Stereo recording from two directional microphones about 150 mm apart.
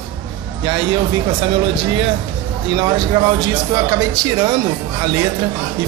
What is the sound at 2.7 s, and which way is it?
Speech, 30° right (ahead or behind).